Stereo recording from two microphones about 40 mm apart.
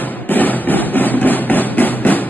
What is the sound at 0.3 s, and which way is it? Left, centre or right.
Hammer, left.